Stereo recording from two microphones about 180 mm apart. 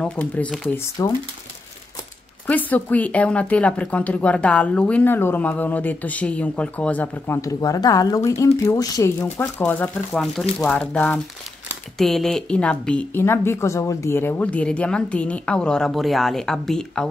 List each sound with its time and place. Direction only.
0.0 s speech: 5° left (ahead or behind)
1.0 s speech: 20° left (ahead or behind)
2.4 s a woman's voice: 10° left (ahead or behind)